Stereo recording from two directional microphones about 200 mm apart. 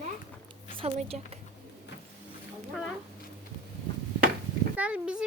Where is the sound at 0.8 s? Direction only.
30° right (ahead or behind).